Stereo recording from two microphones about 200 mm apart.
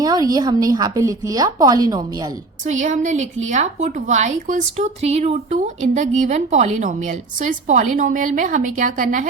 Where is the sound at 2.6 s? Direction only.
40° right (ahead or behind).